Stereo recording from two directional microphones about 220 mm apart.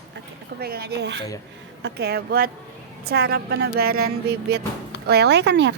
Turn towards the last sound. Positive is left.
turn(degrees=-50)  # may be behind; listen again after turning